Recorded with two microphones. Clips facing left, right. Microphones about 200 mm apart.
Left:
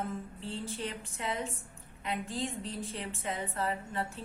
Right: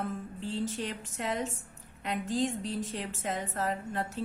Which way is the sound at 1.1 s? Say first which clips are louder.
Right 5 dB; 45° right (ahead or behind).